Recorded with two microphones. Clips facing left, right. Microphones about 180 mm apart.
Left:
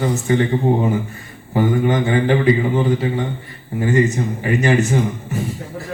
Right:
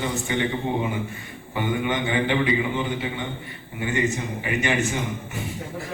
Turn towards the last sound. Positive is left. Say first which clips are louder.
# left 9 dB
turn(degrees=40)  # may be behind; listen again after turning